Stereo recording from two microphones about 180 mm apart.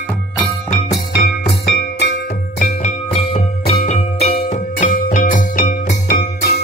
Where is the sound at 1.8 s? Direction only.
70° left (ahead or behind).